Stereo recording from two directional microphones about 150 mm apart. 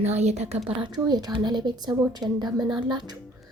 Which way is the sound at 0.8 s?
25° right (ahead or behind).